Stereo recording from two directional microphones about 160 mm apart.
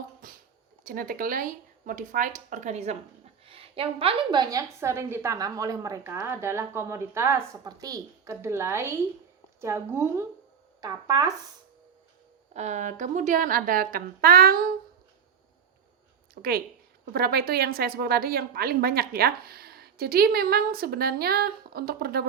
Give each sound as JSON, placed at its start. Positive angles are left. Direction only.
{"t": 0.2, "sound": "a sound", "side_deg": -60}
{"t": 0.9, "sound": "a woman's voice", "side_deg": -60}
{"t": 12.5, "sound": "speech", "side_deg": -45}
{"t": 16.3, "sound": "a woman's voice", "side_deg": -70}